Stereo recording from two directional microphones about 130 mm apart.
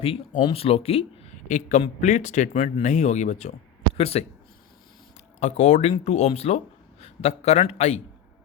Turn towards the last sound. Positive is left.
turn(degrees=55)  # may be behind; listen again after turning